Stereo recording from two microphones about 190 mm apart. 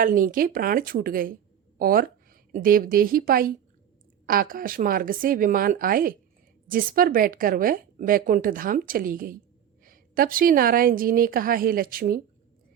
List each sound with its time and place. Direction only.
0.0 s a woman's voice: 45° right (ahead or behind)